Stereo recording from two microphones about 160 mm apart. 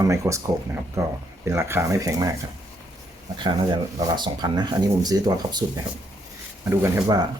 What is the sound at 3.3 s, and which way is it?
Speech, 30° right (ahead or behind).